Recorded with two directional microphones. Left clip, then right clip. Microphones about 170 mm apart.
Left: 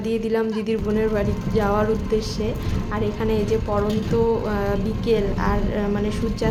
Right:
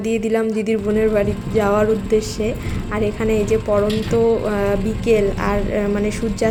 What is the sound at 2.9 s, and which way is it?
A woman's voice, 10° right (ahead or behind).